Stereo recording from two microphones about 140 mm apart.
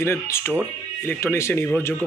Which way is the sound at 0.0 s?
15° left (ahead or behind).